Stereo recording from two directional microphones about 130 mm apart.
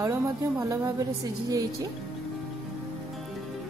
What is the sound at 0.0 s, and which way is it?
A woman's voice, 25° right (ahead or behind).